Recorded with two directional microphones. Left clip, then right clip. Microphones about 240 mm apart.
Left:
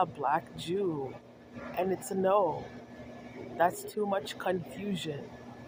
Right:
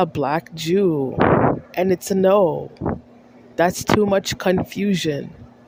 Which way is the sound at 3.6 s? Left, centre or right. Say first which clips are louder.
Right 12 dB; right.